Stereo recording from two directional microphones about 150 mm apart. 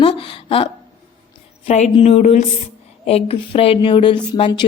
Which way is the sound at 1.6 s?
50° left (ahead or behind).